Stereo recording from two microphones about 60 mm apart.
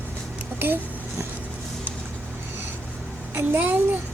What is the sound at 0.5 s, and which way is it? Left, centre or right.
Speech, right.